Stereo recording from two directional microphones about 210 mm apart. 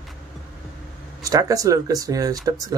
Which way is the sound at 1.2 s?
15° right (ahead or behind).